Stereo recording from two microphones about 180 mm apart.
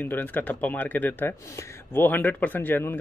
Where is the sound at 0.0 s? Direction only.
10° left (ahead or behind).